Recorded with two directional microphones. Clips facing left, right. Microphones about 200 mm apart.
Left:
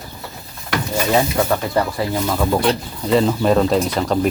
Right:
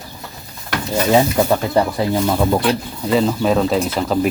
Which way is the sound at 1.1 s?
15° right (ahead or behind).